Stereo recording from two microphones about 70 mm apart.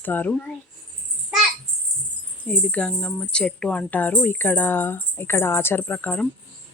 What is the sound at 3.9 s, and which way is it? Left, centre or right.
Speech, left.